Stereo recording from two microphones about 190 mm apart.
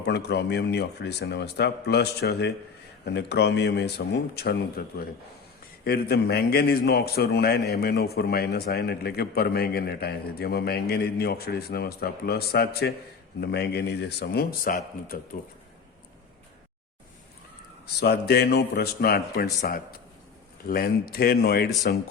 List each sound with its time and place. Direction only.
0.0 s a man's voice: 60° left (ahead or behind)
18.0 s a man's voice: 55° left (ahead or behind)